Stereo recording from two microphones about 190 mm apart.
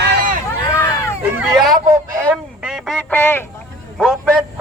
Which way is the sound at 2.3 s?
5° right (ahead or behind).